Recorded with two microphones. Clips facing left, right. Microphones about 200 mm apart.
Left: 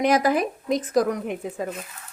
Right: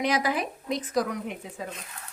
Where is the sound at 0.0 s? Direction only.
50° left (ahead or behind).